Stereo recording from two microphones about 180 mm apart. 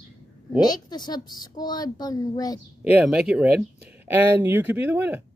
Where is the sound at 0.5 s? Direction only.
25° left (ahead or behind).